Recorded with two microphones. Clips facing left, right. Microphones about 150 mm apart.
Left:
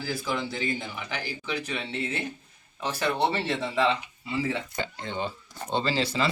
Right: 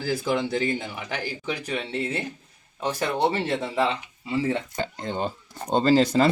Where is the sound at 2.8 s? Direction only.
40° right (ahead or behind).